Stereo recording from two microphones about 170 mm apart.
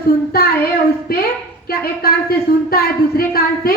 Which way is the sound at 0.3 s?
65° left (ahead or behind).